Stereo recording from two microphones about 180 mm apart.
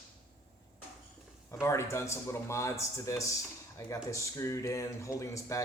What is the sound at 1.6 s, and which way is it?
Speech, 15° left (ahead or behind).